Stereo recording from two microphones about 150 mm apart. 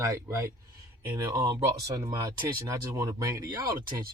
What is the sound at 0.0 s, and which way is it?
Speech, 20° right (ahead or behind).